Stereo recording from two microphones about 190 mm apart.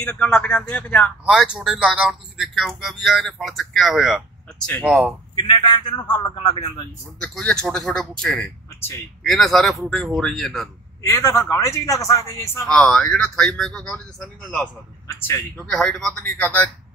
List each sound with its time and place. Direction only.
0.0 s speech: 5° left (ahead or behind)
5.3 s a man's voice: 20° left (ahead or behind)
7.2 s speech: 5° left (ahead or behind)
11.0 s speech: 15° left (ahead or behind)
12.6 s speech: 5° left (ahead or behind)
15.5 s speech: 5° left (ahead or behind)